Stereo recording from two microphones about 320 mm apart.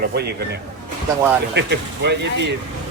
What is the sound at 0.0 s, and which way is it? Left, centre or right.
Speech, right.